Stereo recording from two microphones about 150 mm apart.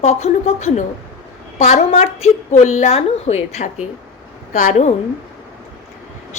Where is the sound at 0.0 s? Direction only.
45° left (ahead or behind).